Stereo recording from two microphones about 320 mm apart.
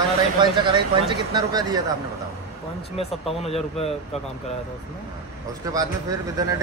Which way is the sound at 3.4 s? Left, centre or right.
Centre.